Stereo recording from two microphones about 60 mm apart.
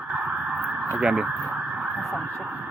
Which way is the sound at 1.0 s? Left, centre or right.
Centre.